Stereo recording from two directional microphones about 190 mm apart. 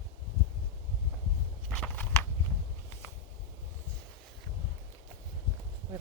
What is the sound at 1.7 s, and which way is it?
Walk, 5° left (ahead or behind).